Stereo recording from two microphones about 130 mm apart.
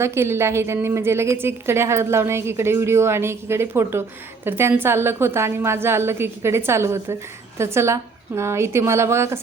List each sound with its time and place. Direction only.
0.0 s a woman's voice: 20° right (ahead or behind)